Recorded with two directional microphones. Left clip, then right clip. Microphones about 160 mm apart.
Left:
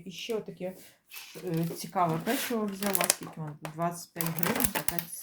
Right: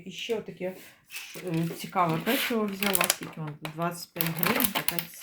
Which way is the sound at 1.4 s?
15° right (ahead or behind).